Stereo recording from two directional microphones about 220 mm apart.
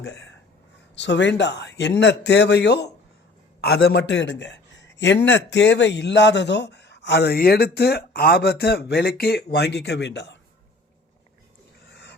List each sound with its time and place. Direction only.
0.0 s a man's voice: 50° left (ahead or behind)